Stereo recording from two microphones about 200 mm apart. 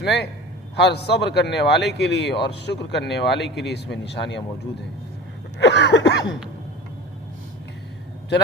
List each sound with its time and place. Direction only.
0.0 s speech: 55° left (ahead or behind)
5.5 s speech: 60° left (ahead or behind)